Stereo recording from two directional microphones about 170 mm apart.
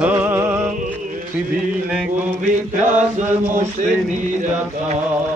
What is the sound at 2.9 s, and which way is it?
Mantra, 45° right (ahead or behind).